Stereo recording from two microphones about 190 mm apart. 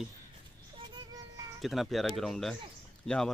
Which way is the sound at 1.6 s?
Centre (ahead or behind).